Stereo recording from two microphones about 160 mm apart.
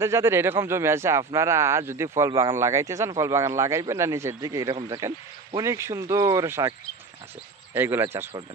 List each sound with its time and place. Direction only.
0.0 s a man's voice: 15° right (ahead or behind)
7.7 s speech: 15° right (ahead or behind)